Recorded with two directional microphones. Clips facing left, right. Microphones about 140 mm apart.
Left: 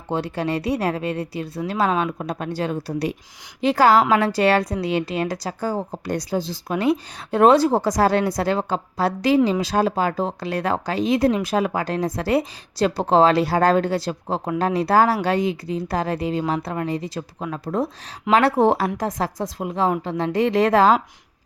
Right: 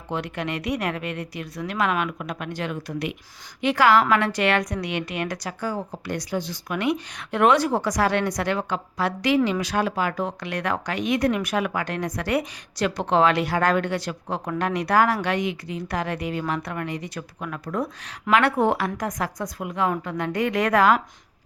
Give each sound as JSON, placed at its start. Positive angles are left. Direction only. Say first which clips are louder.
{"t": 0.1, "sound": "a woman's voice", "louder": "left 5 dB", "side_deg": 30}